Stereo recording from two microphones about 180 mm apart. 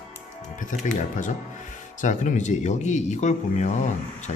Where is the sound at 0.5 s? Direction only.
45° left (ahead or behind).